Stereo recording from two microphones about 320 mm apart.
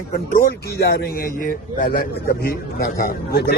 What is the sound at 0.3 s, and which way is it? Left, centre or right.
A man's voice, left.